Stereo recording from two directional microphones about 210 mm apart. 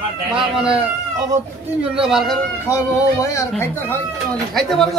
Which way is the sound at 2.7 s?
15° left (ahead or behind).